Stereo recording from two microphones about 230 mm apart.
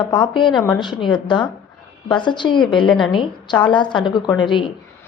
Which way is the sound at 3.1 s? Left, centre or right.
Centre.